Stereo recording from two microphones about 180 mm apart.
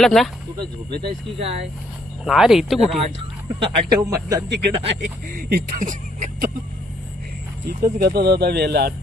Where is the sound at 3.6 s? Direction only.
20° right (ahead or behind).